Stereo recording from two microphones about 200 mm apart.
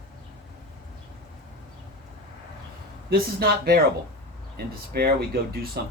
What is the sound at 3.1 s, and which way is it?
Speech, 50° right (ahead or behind).